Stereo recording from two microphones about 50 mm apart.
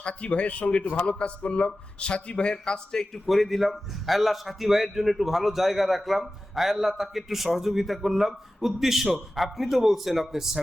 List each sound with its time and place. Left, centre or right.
0.0 s a man's voice: left
3.2 s a man's voice: centre